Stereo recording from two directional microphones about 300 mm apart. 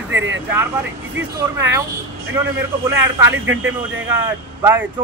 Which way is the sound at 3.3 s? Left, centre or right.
Right.